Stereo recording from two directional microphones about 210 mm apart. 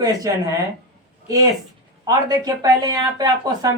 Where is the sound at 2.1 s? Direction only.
15° right (ahead or behind).